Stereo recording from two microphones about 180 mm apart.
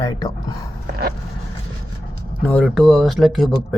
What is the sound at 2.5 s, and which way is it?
Speech, 5° left (ahead or behind).